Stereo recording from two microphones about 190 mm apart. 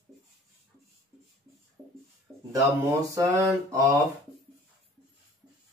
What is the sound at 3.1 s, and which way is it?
Mantra, 15° right (ahead or behind).